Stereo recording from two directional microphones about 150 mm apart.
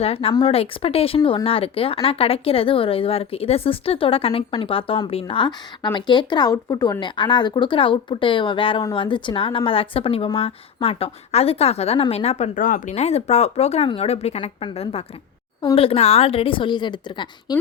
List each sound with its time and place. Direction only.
0.0 s speech: 40° left (ahead or behind)
12.5 s speech: 60° left (ahead or behind); by 17.6 s 30° left (ahead or behind)